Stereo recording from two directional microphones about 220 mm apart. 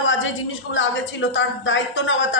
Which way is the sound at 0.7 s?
60° left (ahead or behind).